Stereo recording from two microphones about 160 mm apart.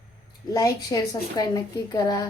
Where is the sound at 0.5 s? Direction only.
25° left (ahead or behind).